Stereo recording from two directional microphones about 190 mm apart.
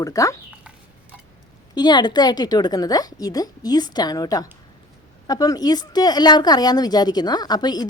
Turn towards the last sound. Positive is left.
turn(degrees=20)  # may be behind; listen again after turning